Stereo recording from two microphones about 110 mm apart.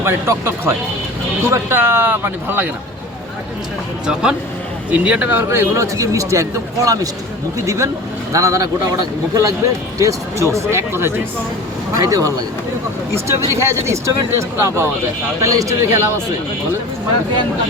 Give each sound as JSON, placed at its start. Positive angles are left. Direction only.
{"t": 0.0, "sound": "speech", "side_deg": -20}
{"t": 4.0, "sound": "a man's voice", "side_deg": -5}